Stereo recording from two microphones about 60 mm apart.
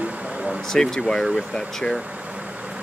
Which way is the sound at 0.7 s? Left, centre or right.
Centre.